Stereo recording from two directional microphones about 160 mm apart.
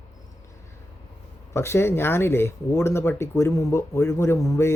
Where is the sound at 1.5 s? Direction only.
15° left (ahead or behind).